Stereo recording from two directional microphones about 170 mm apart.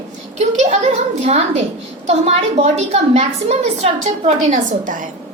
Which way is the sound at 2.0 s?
40° right (ahead or behind).